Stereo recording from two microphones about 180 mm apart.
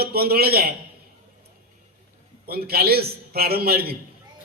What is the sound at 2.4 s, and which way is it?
A man's voice, 60° right (ahead or behind).